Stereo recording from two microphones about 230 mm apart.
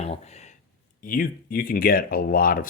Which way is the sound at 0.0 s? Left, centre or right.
Left.